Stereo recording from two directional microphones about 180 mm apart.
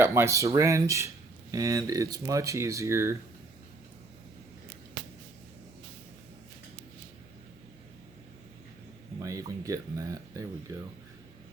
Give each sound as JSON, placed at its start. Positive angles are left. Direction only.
{"t": 0.0, "sound": "speech", "side_deg": -15}
{"t": 9.2, "sound": "speech", "side_deg": -20}